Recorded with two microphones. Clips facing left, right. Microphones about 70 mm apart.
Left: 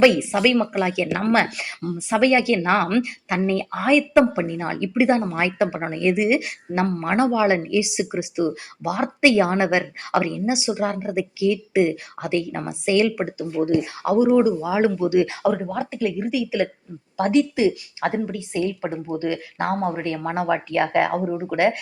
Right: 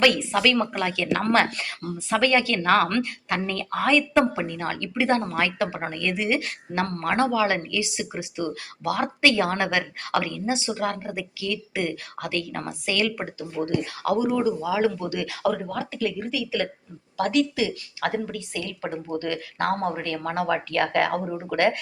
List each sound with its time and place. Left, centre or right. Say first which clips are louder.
0.0 s speech: left 4 dB; centre
20.0 s speech: left 3 dB; centre